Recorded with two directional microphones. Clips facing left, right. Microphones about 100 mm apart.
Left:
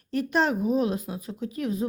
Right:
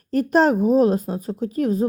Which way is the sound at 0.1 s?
40° right (ahead or behind).